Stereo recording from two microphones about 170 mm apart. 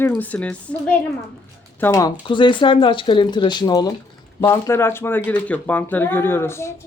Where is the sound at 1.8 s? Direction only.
20° left (ahead or behind).